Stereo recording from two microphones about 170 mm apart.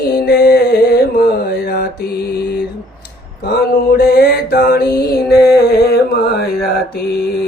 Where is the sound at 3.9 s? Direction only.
70° left (ahead or behind).